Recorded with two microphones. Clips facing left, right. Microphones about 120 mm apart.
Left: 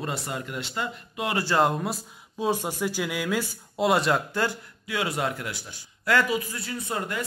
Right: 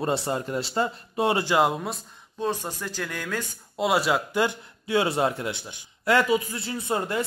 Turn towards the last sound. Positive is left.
turn(degrees=-30)  # may be behind; listen again after turning